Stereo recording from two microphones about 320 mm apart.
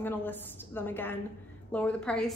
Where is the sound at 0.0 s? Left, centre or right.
Centre.